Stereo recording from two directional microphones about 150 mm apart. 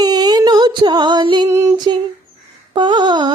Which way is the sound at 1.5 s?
20° right (ahead or behind).